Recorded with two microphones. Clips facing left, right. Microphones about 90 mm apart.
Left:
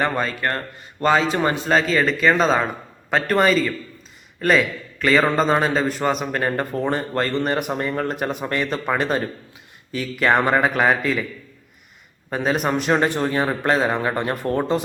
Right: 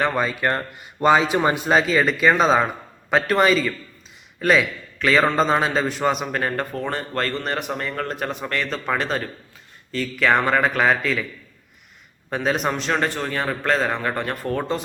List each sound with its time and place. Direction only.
0.0 s a man's voice: 5° right (ahead or behind)
6.9 s speech: 15° left (ahead or behind)
12.3 s a man's voice: 5° left (ahead or behind)
12.8 s speech: 15° left (ahead or behind)